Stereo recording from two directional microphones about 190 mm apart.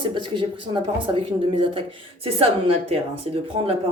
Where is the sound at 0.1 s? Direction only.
25° right (ahead or behind).